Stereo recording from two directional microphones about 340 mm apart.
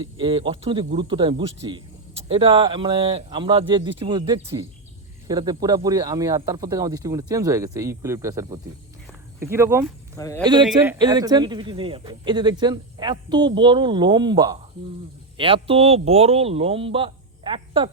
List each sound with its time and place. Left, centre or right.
0.0 s speech: centre
10.2 s speech: centre
10.4 s speech: centre